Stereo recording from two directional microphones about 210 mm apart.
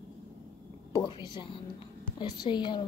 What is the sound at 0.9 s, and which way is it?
A woman's voice, 20° left (ahead or behind).